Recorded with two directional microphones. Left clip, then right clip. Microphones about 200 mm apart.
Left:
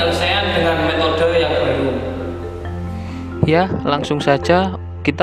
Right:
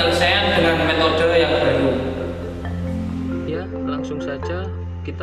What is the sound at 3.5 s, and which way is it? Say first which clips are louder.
Speech: left 14 dB; 55° left (ahead or behind).